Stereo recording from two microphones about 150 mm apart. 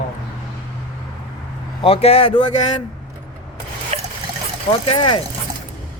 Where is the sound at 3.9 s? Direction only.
45° right (ahead or behind).